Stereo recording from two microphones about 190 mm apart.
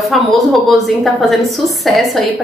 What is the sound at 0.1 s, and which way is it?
Speech, centre (ahead or behind).